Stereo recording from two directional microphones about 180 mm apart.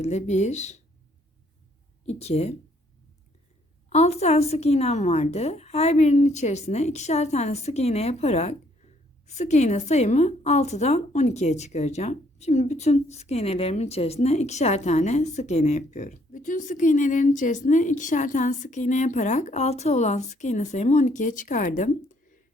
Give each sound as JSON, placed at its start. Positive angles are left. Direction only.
{"t": 0.0, "sound": "a woman's voice", "side_deg": 40}
{"t": 2.0, "sound": "a woman's voice", "side_deg": 35}
{"t": 3.8, "sound": "a woman's voice", "side_deg": 40}